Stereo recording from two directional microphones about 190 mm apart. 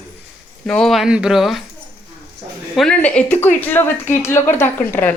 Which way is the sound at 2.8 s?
5° left (ahead or behind).